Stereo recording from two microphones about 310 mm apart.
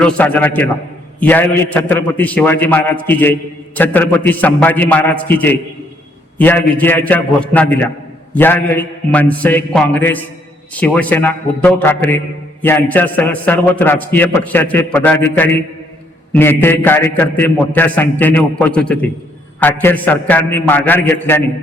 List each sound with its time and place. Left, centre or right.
0.0 s a man's voice: centre